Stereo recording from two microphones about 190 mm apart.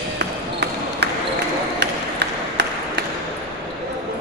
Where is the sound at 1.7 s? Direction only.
65° right (ahead or behind).